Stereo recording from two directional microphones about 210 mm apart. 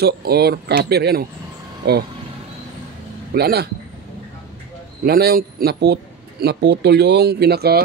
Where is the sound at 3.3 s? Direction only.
50° right (ahead or behind).